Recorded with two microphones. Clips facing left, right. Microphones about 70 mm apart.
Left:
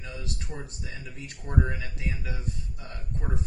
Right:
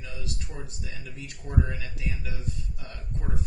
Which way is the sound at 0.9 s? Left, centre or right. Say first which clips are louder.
Left 1 dB; left.